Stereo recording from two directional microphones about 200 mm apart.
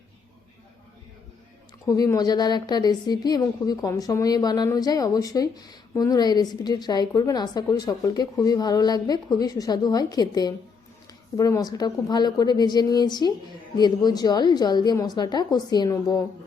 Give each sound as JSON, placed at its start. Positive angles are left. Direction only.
{"t": 2.0, "sound": "a woman's voice", "side_deg": 20}